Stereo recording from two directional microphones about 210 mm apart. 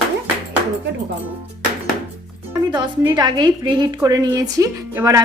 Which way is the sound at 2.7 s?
20° right (ahead or behind).